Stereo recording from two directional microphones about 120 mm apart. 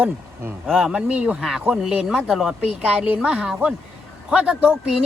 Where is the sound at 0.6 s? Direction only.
5° right (ahead or behind).